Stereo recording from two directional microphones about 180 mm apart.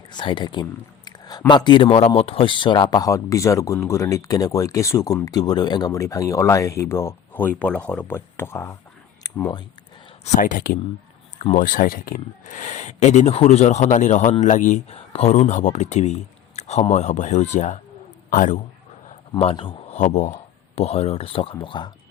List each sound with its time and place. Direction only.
0.1 s speech: 25° left (ahead or behind)
9.2 s a sound: 20° left (ahead or behind)
10.2 s a man's voice: 45° left (ahead or behind)
19.4 s a man's voice: 30° left (ahead or behind)
20.0 s speech: 45° left (ahead or behind); by 21.9 s 25° left (ahead or behind)